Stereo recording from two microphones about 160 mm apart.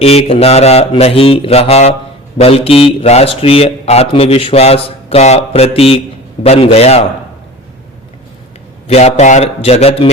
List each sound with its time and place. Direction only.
0.0 s speech: 40° left (ahead or behind)
8.9 s speech: 40° left (ahead or behind)